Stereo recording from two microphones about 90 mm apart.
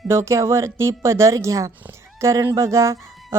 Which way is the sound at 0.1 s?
30° right (ahead or behind).